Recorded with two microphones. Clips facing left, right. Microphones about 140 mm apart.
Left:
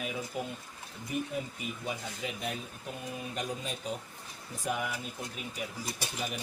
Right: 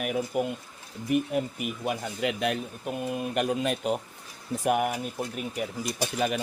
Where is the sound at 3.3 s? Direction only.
70° right (ahead or behind).